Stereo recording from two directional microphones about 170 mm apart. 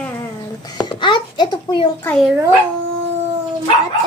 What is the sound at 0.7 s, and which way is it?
Babbling, 25° left (ahead or behind).